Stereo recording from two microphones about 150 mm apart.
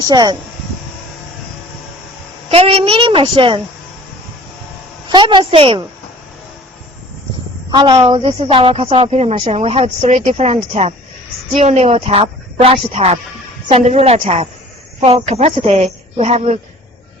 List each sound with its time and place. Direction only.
0.0 s speech: 25° right (ahead or behind)
2.5 s a woman's voice: 40° right (ahead or behind)
5.0 s a woman's voice: 30° right (ahead or behind)
7.7 s a woman's voice: 30° right (ahead or behind)